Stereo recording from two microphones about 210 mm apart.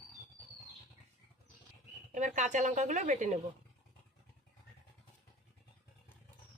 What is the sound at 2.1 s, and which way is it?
Speech, 35° right (ahead or behind).